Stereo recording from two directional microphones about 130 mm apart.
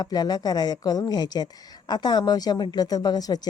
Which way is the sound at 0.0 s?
30° left (ahead or behind).